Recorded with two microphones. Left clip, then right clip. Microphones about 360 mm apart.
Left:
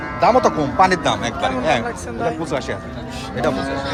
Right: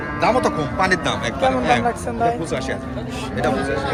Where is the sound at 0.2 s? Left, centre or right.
Left.